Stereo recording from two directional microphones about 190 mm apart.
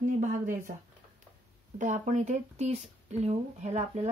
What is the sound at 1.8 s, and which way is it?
Speech, 40° right (ahead or behind).